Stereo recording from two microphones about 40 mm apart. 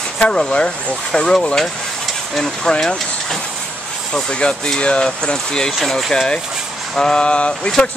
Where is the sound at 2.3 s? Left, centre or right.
Centre.